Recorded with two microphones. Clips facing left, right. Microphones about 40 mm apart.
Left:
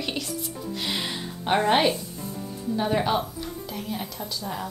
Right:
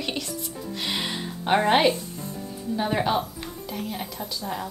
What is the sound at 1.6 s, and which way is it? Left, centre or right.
A woman's voice, centre.